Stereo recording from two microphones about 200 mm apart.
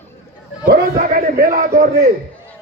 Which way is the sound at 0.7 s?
45° right (ahead or behind).